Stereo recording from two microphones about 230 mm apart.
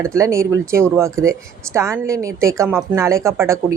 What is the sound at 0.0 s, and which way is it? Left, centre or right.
Speech, centre.